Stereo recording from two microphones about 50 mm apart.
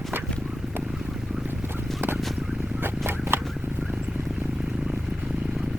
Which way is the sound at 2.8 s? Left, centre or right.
Right.